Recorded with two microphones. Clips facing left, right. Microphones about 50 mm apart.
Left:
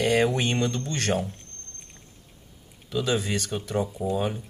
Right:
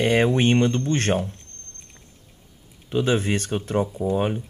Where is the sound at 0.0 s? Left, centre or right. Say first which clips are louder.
Right 3 dB; right.